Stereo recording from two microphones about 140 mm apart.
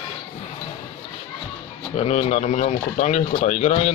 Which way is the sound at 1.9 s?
50° left (ahead or behind).